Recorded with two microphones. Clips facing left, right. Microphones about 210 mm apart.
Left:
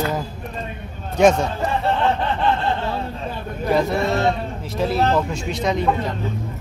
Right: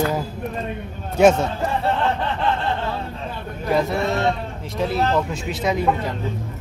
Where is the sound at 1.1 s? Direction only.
5° right (ahead or behind).